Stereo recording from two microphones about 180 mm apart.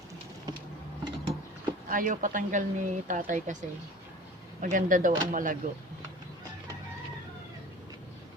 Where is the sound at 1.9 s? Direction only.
50° right (ahead or behind).